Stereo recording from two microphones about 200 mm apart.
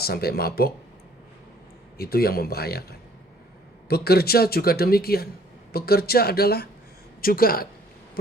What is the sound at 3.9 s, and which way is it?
Speech, 50° left (ahead or behind).